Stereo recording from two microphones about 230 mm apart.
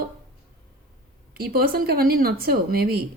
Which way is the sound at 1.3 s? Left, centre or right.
Right.